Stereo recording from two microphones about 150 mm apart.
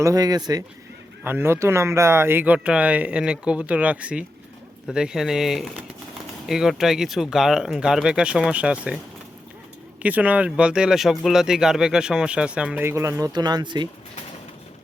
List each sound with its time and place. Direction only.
0.0 s speech: 25° right (ahead or behind)
1.2 s speech: 15° right (ahead or behind)
10.0 s speech: 10° right (ahead or behind); by 13.8 s 30° right (ahead or behind)